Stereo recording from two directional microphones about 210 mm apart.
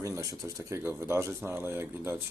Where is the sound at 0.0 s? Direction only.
15° right (ahead or behind).